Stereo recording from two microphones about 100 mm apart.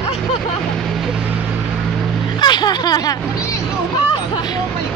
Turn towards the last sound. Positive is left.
turn(degrees=45)  # may be behind; listen again after turning